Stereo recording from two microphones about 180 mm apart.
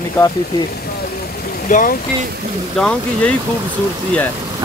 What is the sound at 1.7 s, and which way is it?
Speech, 50° left (ahead or behind).